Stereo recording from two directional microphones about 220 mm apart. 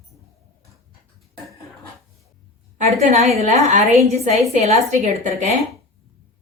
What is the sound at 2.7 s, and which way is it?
A woman's voice, 35° right (ahead or behind).